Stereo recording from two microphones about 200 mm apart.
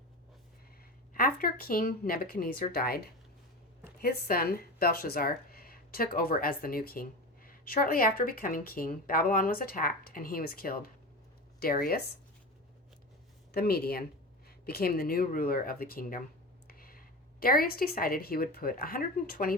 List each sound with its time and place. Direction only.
1.1 s speech: 45° left (ahead or behind)
13.5 s speech: 50° left (ahead or behind)